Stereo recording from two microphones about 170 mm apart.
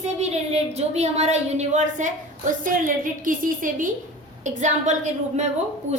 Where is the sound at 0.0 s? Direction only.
40° right (ahead or behind).